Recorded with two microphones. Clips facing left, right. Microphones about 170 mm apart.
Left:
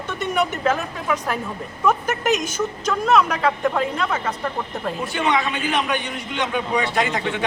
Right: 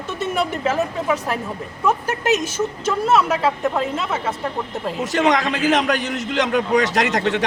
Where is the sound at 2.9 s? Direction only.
5° right (ahead or behind).